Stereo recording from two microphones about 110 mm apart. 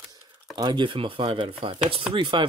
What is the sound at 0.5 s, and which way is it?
Speech, 45° right (ahead or behind).